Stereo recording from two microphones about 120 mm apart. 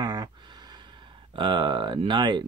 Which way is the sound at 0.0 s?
40° right (ahead or behind).